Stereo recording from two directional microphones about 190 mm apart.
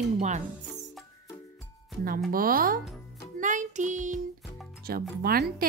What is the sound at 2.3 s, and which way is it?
Speech, 50° right (ahead or behind).